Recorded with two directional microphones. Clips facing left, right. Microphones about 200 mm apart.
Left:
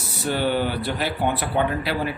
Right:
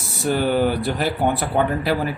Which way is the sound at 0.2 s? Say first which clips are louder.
Right 4 dB; 45° right (ahead or behind).